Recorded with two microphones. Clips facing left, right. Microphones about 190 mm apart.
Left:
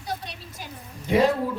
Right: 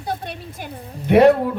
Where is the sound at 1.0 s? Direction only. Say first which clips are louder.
Right 8 dB; 65° right (ahead or behind).